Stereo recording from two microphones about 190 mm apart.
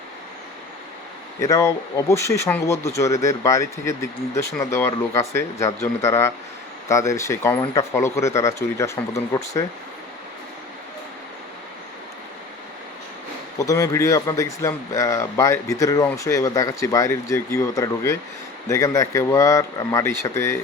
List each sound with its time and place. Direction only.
1.4 s a man's voice: 15° left (ahead or behind)
7.6 s speech: 25° left (ahead or behind)
7.9 s a man's voice: 15° left (ahead or behind)
13.6 s a man's voice: 20° left (ahead or behind)